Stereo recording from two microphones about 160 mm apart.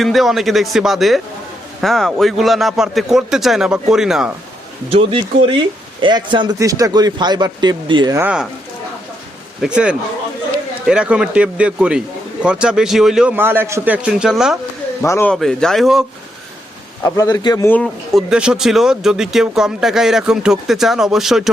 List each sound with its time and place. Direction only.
0.0 s speech: centre (ahead or behind)
4.9 s speech: 35° right (ahead or behind)
8.1 s a man's voice: 10° right (ahead or behind)
9.6 s a man's voice: 5° right (ahead or behind)
15.0 s speech: 20° left (ahead or behind)
15.3 s speech: 5° left (ahead or behind)
17.0 s a man's voice: 20° left (ahead or behind)
17.8 s speech: centre (ahead or behind)